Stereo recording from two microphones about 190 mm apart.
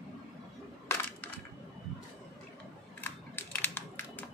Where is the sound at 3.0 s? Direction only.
10° left (ahead or behind).